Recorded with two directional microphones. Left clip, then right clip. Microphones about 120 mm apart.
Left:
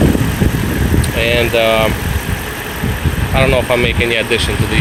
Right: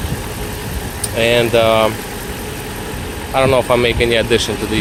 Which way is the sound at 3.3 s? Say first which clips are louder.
Even; 25° right (ahead or behind).